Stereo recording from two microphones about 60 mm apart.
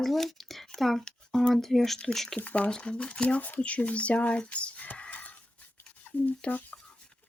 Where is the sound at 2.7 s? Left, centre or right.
Centre.